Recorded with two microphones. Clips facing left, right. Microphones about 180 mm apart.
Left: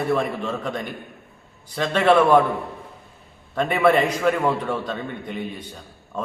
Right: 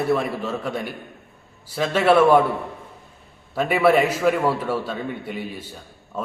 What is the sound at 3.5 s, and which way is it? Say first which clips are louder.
A man's voice: right 1 dB; 5° right (ahead or behind).